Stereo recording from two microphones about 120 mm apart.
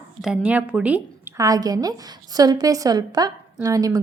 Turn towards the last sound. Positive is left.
turn(degrees=-30)  # may be behind; listen again after turning